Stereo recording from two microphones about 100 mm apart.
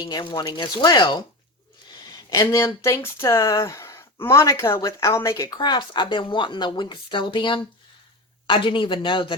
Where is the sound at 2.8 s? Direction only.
30° left (ahead or behind).